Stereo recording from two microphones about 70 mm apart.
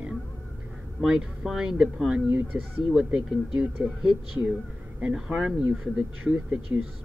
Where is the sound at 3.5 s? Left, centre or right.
Right.